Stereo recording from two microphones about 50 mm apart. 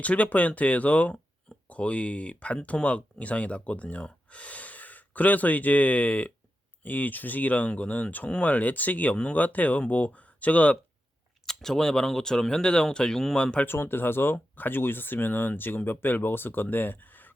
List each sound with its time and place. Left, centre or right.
0.0 s speech: left
11.4 s speech: centre
13.7 s speech: left